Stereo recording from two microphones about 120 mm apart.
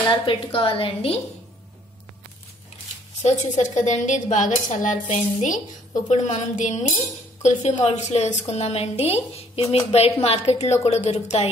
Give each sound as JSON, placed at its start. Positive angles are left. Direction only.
{"t": 0.3, "sound": "a woman's voice", "side_deg": 50}
{"t": 3.2, "sound": "a woman's voice", "side_deg": 65}
{"t": 7.4, "sound": "a woman's voice", "side_deg": 65}